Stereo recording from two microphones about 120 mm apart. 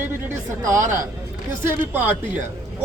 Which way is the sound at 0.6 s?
20° right (ahead or behind).